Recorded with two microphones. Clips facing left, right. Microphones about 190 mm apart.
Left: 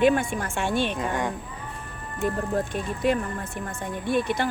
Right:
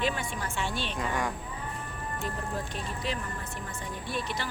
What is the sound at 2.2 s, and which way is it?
Speech, 55° left (ahead or behind).